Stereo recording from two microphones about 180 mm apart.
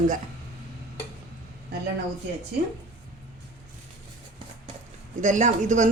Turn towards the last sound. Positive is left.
turn(degrees=-45)  # may be behind; listen again after turning